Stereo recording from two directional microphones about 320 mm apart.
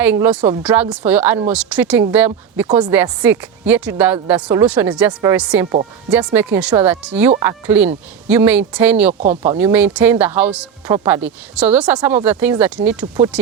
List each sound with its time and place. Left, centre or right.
0.0 s speech: centre
9.2 s speech: centre
9.6 s speech: centre